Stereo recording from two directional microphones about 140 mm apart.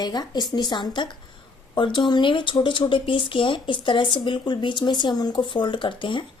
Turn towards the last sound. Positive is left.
turn(degrees=35)  # may be behind; listen again after turning